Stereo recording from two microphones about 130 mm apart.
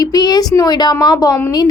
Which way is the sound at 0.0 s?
30° left (ahead or behind).